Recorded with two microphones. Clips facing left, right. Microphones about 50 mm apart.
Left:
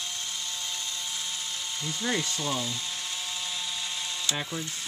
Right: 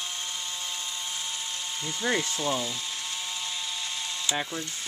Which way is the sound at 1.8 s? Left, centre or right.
Centre.